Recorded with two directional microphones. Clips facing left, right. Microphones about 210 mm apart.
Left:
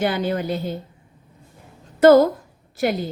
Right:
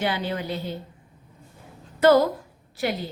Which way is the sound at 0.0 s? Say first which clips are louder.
Left 5 dB; 45° left (ahead or behind).